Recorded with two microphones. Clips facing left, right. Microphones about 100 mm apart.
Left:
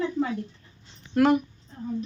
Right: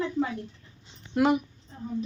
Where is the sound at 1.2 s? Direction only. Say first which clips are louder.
Left 3 dB; 10° right (ahead or behind).